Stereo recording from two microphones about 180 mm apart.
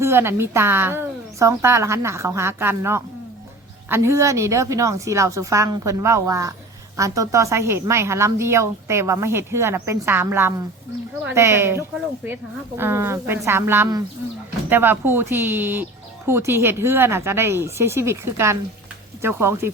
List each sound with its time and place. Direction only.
0.0 s speech: 15° right (ahead or behind)